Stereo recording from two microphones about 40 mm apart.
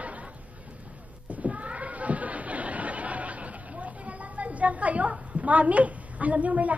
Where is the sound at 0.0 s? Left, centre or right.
Right.